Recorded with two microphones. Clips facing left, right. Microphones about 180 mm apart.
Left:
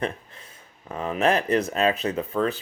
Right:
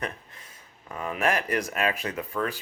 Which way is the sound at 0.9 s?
25° left (ahead or behind).